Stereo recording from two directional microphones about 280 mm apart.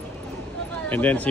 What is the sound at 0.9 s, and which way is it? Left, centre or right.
Speech, centre.